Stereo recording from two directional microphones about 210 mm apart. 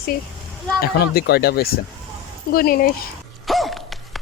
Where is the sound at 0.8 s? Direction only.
50° left (ahead or behind).